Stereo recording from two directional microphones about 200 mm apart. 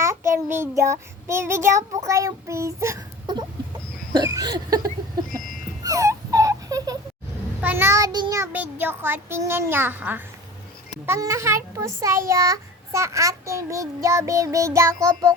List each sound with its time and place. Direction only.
0.0 s child singing: 15° right (ahead or behind)
4.1 s a sound: 20° right (ahead or behind)
7.6 s a child's voice: 10° right (ahead or behind)